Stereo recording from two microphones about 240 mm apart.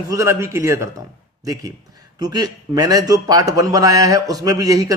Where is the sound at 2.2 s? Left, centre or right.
Centre.